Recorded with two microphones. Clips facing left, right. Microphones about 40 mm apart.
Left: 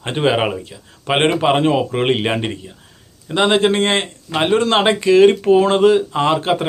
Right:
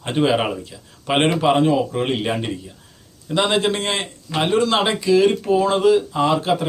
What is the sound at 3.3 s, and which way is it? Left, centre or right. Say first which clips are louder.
Speech: left 4 dB; left.